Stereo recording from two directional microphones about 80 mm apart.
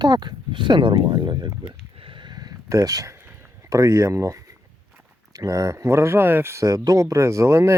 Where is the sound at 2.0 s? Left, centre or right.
Right.